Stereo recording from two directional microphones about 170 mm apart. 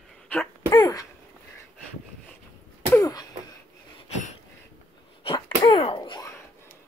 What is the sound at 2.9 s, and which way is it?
Throat clearing, 20° left (ahead or behind).